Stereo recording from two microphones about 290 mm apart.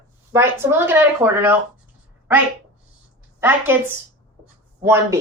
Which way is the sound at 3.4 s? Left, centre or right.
Centre.